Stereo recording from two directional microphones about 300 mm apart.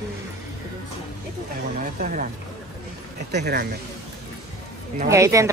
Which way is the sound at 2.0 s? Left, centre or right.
Right.